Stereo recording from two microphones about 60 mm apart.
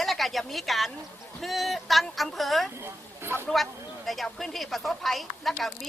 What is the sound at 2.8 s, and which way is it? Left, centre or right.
Speech, right.